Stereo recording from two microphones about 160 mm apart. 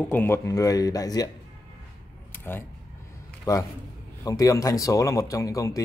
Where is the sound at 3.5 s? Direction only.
20° left (ahead or behind).